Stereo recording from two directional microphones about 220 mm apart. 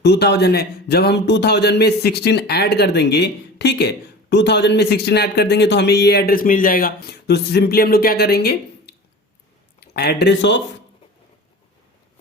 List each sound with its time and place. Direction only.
0.0 s speech: 50° left (ahead or behind)